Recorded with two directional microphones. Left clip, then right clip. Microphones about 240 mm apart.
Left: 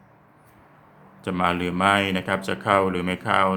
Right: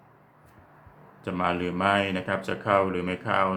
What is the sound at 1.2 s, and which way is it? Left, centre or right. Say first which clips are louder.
Speech: left 4 dB; left.